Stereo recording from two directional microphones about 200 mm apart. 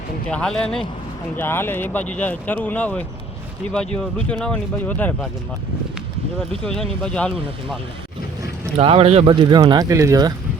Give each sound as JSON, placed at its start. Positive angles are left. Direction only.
{"t": 0.3, "sound": "speech", "side_deg": 5}
{"t": 6.5, "sound": "speech", "side_deg": 5}
{"t": 8.8, "sound": "speech", "side_deg": -30}